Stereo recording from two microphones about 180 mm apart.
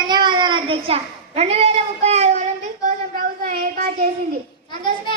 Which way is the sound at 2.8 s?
45° right (ahead or behind).